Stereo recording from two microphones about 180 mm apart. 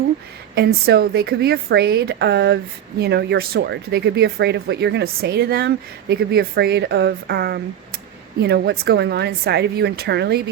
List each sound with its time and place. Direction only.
0.5 s speech: 60° right (ahead or behind)